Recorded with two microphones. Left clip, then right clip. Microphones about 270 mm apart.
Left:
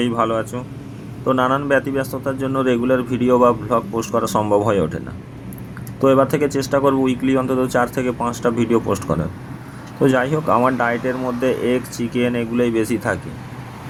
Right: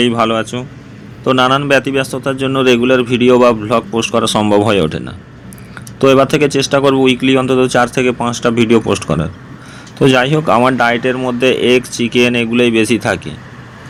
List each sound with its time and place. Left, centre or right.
0.0 s a man's voice: left
6.0 s a man's voice: left